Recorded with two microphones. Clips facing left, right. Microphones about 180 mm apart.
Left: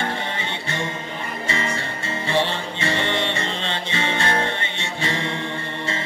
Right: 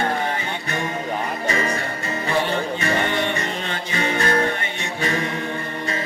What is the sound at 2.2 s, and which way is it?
Music, 25° left (ahead or behind).